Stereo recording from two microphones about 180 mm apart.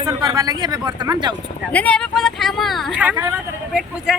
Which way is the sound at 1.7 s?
5° left (ahead or behind).